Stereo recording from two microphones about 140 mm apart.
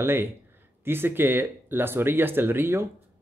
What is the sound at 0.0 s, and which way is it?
Speech, 15° right (ahead or behind).